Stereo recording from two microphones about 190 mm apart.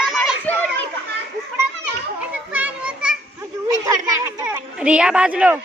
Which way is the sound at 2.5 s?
5° right (ahead or behind).